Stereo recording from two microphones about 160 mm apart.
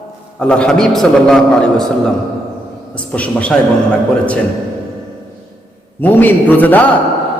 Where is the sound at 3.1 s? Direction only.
10° left (ahead or behind).